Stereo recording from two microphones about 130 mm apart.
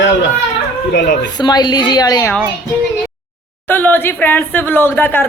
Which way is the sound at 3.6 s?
15° left (ahead or behind).